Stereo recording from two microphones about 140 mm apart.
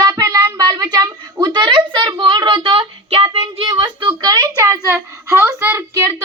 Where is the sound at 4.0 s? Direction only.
30° right (ahead or behind).